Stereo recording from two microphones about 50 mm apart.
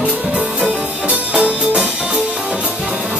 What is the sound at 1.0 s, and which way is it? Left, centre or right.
Music, right.